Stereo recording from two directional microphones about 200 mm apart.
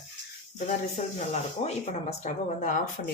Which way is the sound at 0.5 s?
35° left (ahead or behind).